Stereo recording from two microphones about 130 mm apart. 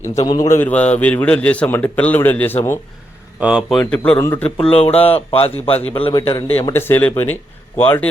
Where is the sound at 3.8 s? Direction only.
10° left (ahead or behind).